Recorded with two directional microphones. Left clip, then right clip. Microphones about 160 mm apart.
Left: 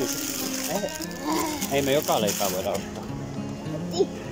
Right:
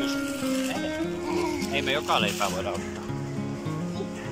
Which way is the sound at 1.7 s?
35° left (ahead or behind).